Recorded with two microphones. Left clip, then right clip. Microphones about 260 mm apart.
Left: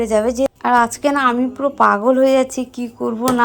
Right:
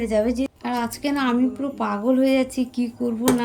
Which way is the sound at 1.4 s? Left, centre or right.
Left.